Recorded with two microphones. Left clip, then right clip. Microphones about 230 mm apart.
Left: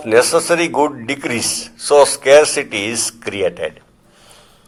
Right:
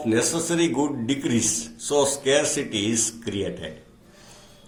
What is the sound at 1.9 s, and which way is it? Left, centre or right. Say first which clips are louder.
Speech: left 12 dB; left.